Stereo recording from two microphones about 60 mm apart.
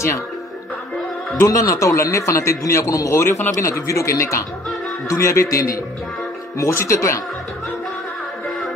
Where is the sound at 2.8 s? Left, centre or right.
Left.